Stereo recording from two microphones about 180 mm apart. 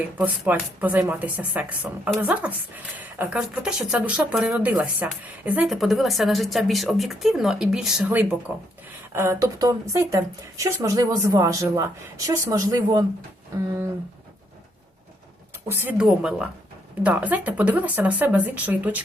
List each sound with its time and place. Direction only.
0.2 s speech: 10° right (ahead or behind)
15.7 s speech: 10° right (ahead or behind)